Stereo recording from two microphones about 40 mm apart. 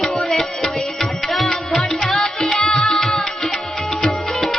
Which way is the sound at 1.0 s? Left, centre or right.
Centre.